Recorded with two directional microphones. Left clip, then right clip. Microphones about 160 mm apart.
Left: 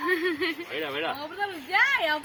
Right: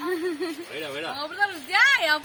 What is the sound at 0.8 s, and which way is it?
Speech, 40° left (ahead or behind).